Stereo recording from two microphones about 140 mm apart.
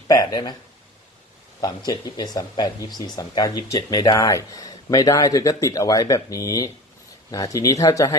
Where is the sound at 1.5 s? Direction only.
30° left (ahead or behind).